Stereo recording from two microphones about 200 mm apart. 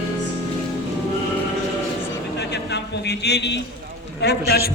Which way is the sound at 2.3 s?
55° left (ahead or behind).